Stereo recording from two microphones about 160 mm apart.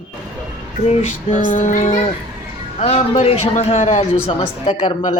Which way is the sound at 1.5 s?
55° left (ahead or behind).